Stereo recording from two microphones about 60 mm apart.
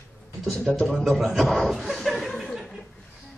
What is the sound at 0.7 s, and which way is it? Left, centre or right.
Speech, centre.